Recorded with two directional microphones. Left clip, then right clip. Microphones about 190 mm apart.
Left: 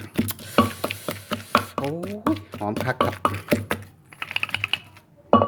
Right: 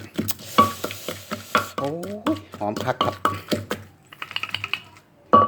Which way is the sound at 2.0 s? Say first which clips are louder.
Even; 20° left (ahead or behind).